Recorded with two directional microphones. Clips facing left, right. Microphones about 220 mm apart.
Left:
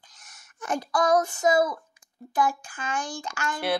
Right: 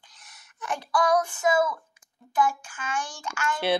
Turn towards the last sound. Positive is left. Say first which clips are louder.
# even
turn(degrees=40)  # may be behind; listen again after turning